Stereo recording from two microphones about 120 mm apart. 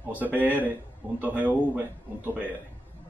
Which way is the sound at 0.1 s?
15° right (ahead or behind).